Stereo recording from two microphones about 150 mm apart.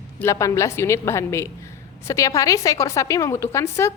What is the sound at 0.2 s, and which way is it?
A woman's voice, 20° left (ahead or behind).